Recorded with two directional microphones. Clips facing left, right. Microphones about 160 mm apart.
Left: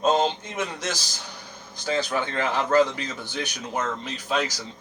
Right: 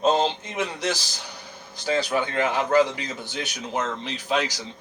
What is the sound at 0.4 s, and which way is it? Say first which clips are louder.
A man's voice: right 3 dB; 15° right (ahead or behind).